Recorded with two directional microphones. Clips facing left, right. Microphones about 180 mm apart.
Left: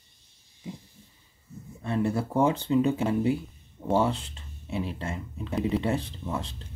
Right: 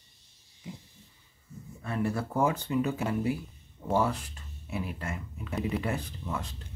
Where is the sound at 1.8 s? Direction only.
25° left (ahead or behind).